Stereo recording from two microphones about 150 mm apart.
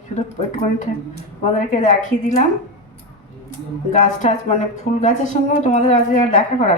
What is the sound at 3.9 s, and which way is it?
Speech, 55° left (ahead or behind).